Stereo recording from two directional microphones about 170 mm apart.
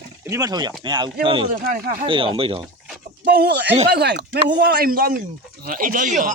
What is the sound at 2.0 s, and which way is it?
Speech, 30° right (ahead or behind).